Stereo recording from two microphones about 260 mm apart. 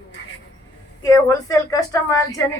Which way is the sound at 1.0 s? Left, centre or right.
Centre.